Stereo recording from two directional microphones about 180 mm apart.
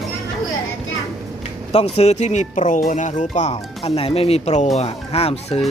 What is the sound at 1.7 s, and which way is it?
Speech, 35° left (ahead or behind).